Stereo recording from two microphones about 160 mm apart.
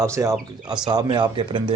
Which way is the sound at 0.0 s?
20° right (ahead or behind).